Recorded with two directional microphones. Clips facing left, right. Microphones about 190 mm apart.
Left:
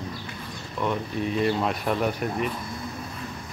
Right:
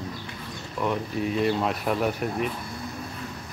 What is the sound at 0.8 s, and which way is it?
Speech, 5° right (ahead or behind).